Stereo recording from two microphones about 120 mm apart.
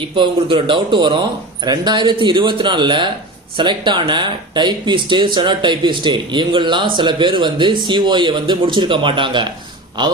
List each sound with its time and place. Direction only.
0.2 s speech: 45° right (ahead or behind)